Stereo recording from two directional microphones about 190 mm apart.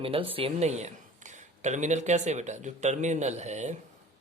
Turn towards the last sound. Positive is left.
turn(degrees=-35)  # may be behind; listen again after turning